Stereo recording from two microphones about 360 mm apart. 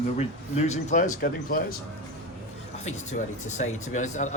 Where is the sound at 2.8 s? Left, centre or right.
Centre.